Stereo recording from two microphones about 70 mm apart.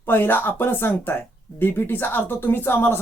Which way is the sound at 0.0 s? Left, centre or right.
Left.